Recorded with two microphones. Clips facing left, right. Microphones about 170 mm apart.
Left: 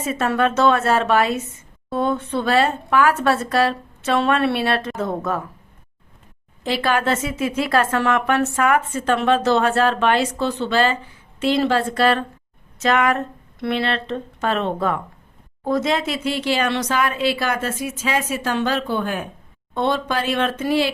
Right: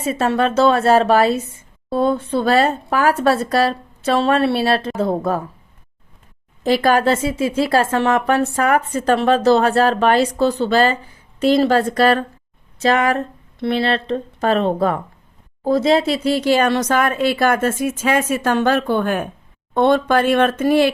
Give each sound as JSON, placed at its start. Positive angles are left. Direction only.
{"t": 0.0, "sound": "speech", "side_deg": -30}
{"t": 6.6, "sound": "speech", "side_deg": -45}